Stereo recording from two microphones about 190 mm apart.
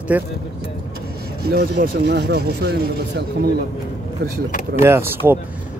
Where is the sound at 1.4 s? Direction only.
55° right (ahead or behind).